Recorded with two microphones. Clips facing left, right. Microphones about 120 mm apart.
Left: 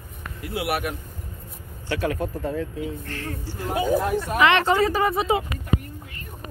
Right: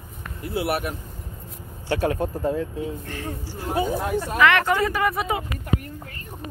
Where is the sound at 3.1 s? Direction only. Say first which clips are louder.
Even; 15° right (ahead or behind).